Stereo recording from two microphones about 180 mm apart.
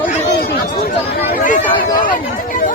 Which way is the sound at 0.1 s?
55° left (ahead or behind).